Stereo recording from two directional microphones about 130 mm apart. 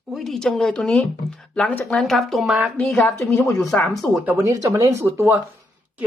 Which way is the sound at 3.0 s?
20° left (ahead or behind).